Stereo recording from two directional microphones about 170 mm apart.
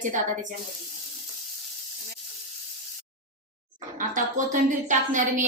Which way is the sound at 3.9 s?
50° right (ahead or behind).